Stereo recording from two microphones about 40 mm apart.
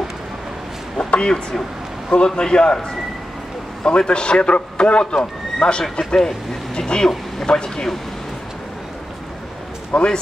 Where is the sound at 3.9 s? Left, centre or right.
Left.